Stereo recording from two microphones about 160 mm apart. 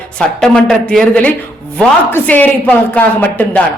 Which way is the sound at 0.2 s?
5° left (ahead or behind).